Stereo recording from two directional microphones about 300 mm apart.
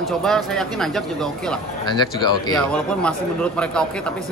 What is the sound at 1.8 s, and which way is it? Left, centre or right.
Speech, centre.